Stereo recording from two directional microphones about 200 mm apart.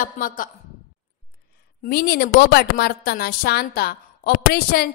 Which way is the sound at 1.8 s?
50° left (ahead or behind).